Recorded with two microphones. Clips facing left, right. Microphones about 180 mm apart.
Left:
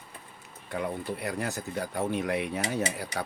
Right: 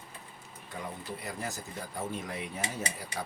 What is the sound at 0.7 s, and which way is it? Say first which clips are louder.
Speech: left 8 dB; 65° left (ahead or behind).